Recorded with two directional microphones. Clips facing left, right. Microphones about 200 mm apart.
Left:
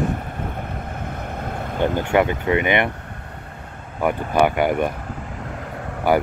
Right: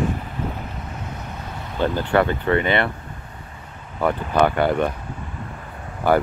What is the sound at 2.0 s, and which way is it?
Speech, 15° left (ahead or behind).